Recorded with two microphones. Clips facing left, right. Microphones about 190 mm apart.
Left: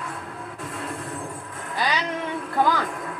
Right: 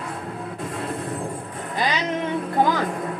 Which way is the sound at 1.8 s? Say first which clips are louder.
Right 2 dB; 20° right (ahead or behind).